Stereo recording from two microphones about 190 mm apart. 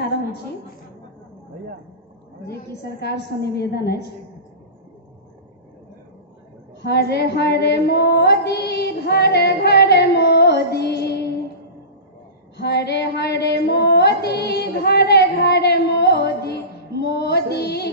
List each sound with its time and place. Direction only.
2.4 s female singing: 55° left (ahead or behind)
6.8 s female singing: 60° left (ahead or behind)
12.5 s female singing: 60° left (ahead or behind)